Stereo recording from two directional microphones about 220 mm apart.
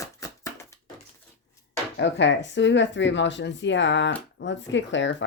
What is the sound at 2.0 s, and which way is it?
Speech, 55° left (ahead or behind).